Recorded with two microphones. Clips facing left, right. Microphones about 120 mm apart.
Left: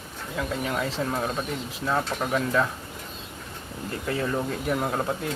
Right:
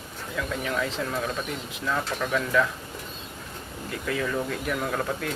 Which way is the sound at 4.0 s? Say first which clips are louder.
Left 1 dB; 30° left (ahead or behind).